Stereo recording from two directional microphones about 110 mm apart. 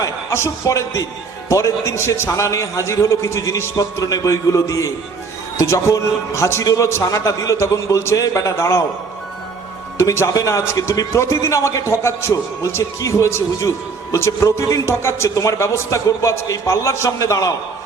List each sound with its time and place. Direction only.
0.0 s a man's voice: 25° left (ahead or behind)
10.0 s a man's voice: 25° left (ahead or behind)